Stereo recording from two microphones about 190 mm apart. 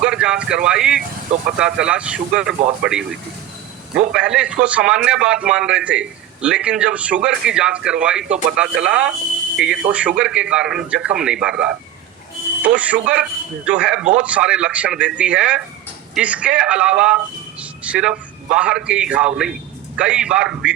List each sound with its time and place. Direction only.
0.0 s a man's voice: 5° right (ahead or behind)